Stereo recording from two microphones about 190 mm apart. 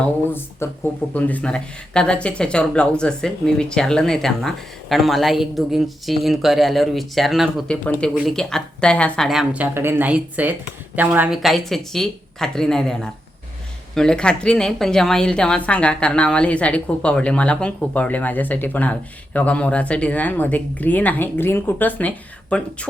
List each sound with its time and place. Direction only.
0.3 s a woman's voice: 10° left (ahead or behind)